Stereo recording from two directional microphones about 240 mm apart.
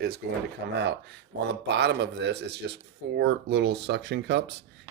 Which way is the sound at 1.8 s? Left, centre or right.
Right.